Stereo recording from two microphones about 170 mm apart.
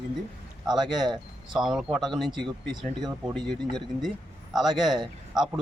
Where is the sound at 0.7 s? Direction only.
25° right (ahead or behind).